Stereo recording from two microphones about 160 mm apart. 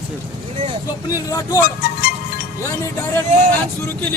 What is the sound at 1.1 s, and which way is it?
Speech, 20° left (ahead or behind).